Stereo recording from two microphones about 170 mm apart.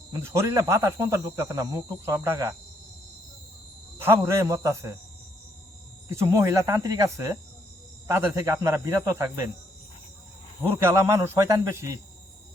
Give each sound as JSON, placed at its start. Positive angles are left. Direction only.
{"t": 0.1, "sound": "speech", "side_deg": -15}
{"t": 4.0, "sound": "speech", "side_deg": -15}
{"t": 6.1, "sound": "speech", "side_deg": -15}
{"t": 10.8, "sound": "speech", "side_deg": -15}